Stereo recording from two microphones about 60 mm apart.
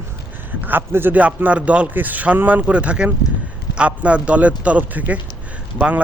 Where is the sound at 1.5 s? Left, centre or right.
Centre.